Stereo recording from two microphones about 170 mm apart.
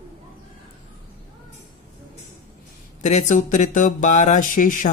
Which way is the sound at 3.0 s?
45° left (ahead or behind).